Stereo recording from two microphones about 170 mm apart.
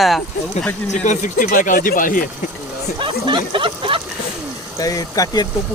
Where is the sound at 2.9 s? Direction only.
30° right (ahead or behind).